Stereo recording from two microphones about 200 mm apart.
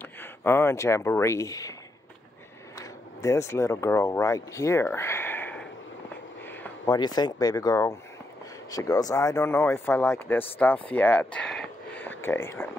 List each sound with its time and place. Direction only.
0.2 s speech: 10° left (ahead or behind)
2.8 s speech: 15° left (ahead or behind)
6.9 s speech: 20° left (ahead or behind)